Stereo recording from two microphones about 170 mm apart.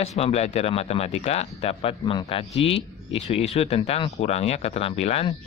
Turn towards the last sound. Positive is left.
turn(degrees=35)  # may be behind; listen again after turning